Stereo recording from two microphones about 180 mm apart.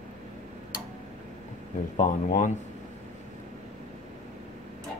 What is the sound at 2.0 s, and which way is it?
Speech, 45° left (ahead or behind).